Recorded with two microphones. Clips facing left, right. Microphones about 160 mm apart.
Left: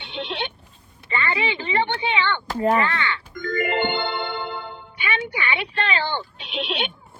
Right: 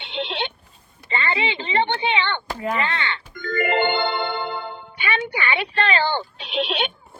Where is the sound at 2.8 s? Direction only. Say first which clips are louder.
Left 1 dB; 20° right (ahead or behind).